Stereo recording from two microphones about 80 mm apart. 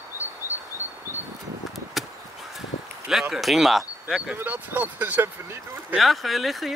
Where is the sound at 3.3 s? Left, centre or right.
Centre.